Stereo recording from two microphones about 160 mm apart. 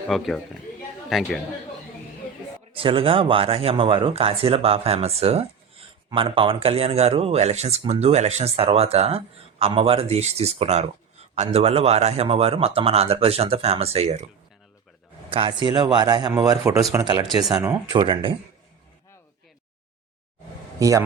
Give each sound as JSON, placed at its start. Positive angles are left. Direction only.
{"t": 0.1, "sound": "a man's voice", "side_deg": 0}
{"t": 2.7, "sound": "speech", "side_deg": -35}
{"t": 15.3, "sound": "a man's voice", "side_deg": -30}
{"t": 17.9, "sound": "speech", "side_deg": -30}
{"t": 20.7, "sound": "a man's voice", "side_deg": -20}